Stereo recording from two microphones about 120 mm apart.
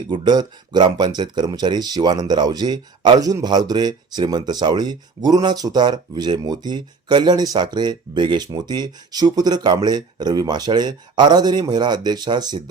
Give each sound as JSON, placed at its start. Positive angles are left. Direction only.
{"t": 0.1, "sound": "speech", "side_deg": -35}